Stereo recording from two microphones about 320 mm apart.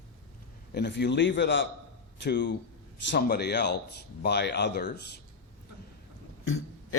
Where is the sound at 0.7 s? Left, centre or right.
Left.